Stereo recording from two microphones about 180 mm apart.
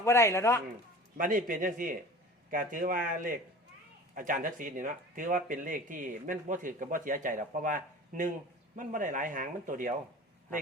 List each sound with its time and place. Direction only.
0.0 s a man's voice: 15° left (ahead or behind)
1.1 s speech: 50° right (ahead or behind)